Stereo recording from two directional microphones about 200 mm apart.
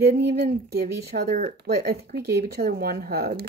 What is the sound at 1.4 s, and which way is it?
Speech, 50° right (ahead or behind).